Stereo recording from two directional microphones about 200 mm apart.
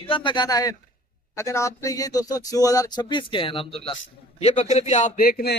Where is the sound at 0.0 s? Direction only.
25° left (ahead or behind).